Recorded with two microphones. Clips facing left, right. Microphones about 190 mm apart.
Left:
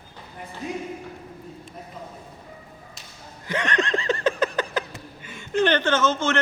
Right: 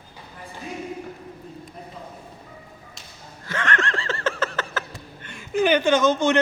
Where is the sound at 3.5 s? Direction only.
15° left (ahead or behind).